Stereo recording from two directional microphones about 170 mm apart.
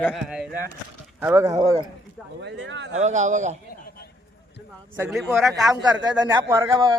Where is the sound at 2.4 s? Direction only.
90° right.